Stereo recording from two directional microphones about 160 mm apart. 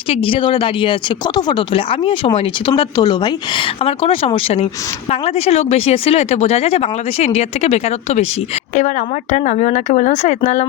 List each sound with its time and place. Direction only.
0.1 s speech: 35° left (ahead or behind)
9.3 s speech: 45° left (ahead or behind)